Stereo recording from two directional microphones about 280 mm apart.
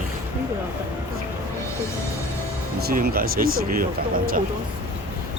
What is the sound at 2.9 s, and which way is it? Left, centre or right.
Speech, right.